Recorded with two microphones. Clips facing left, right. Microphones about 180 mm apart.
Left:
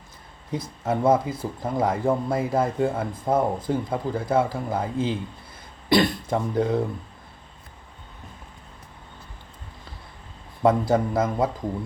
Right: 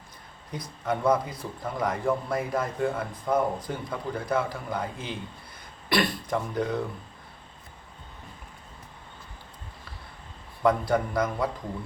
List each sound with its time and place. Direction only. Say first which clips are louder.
0.5 s speech: left 4 dB; 25° left (ahead or behind)
5.9 s speech: left 5 dB; 25° left (ahead or behind)
10.6 s speech: left 4 dB; 25° left (ahead or behind)